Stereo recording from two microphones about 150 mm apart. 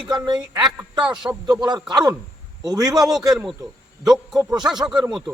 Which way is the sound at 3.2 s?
25° right (ahead or behind).